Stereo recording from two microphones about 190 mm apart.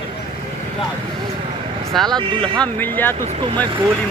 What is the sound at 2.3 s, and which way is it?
Speech, 25° right (ahead or behind).